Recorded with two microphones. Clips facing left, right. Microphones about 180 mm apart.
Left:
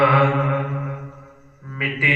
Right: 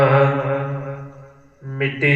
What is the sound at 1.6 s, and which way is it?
Mantra, 45° right (ahead or behind).